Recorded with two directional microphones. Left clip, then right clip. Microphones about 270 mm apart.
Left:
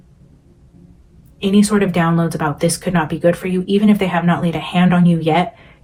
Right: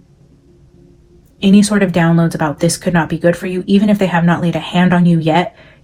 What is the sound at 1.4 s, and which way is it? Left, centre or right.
Speech, right.